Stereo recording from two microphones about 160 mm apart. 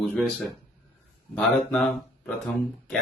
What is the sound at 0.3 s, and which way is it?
Speech, centre (ahead or behind).